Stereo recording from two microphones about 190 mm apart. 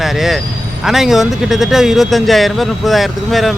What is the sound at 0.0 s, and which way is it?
Speech, centre (ahead or behind).